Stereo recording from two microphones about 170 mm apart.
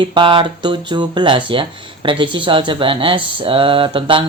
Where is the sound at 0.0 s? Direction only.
30° right (ahead or behind).